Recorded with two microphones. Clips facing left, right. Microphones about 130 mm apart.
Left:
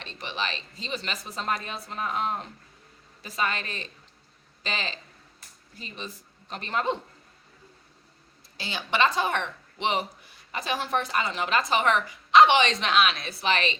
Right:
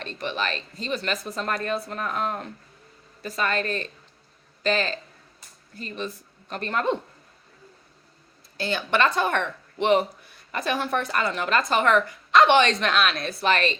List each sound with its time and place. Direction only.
0.0 s speech: 50° right (ahead or behind)
3.5 s speech: 50° right (ahead or behind)
8.5 s speech: 55° right (ahead or behind)